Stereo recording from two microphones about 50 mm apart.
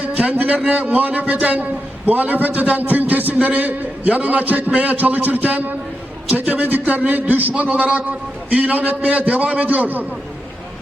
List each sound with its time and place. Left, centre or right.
0.0 s a man's voice: right